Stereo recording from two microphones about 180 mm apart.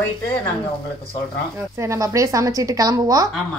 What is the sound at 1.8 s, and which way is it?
A woman's voice, 15° right (ahead or behind).